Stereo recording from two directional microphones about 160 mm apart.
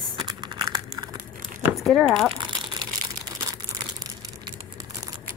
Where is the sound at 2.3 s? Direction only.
30° right (ahead or behind).